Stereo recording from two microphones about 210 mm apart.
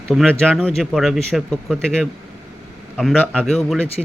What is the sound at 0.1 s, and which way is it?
A man's voice, centre (ahead or behind).